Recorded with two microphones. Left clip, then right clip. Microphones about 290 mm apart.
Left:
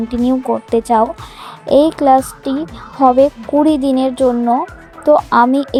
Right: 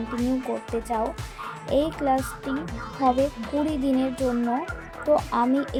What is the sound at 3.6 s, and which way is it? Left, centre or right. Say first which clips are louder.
A woman's voice: left 12 dB; left.